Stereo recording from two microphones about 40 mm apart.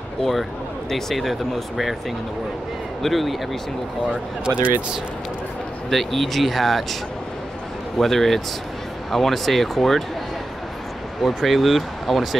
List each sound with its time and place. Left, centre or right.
0.2 s speech: centre
4.1 s speech: right
5.9 s speech: centre
8.0 s speech: centre
11.2 s speech: centre